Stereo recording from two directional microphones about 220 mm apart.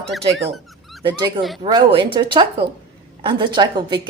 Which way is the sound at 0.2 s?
25° right (ahead or behind).